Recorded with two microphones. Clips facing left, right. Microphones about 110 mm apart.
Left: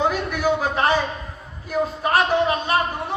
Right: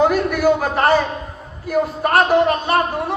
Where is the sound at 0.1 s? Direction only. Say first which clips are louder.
Right 6 dB; 50° right (ahead or behind).